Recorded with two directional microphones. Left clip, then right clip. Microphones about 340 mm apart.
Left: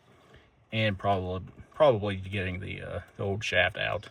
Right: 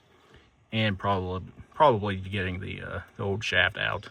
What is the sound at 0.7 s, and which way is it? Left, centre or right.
Speech, centre.